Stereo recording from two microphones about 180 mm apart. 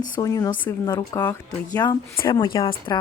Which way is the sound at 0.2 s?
20° left (ahead or behind).